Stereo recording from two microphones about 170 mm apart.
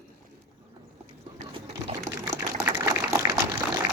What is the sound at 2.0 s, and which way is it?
Liquid, 15° right (ahead or behind).